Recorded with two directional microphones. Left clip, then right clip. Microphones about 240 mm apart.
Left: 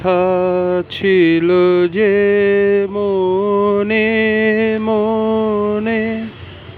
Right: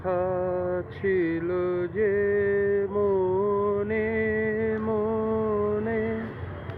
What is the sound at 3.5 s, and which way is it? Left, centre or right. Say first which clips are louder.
Music: left 11 dB; left.